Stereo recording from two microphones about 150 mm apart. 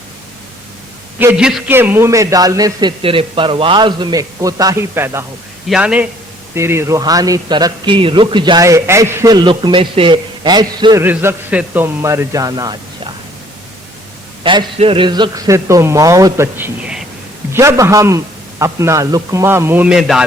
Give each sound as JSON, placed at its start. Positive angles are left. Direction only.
{"t": 1.2, "sound": "a man's voice", "side_deg": -10}
{"t": 3.0, "sound": "a man's voice", "side_deg": -35}
{"t": 5.6, "sound": "a man's voice", "side_deg": -5}
{"t": 8.6, "sound": "a man's voice", "side_deg": -20}
{"t": 11.0, "sound": "a man's voice", "side_deg": -15}
{"t": 14.4, "sound": "a man's voice", "side_deg": -30}